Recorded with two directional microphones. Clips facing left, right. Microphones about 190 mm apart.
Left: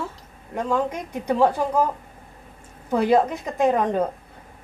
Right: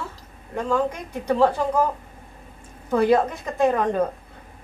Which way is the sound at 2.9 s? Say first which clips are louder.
Even; 15° left (ahead or behind).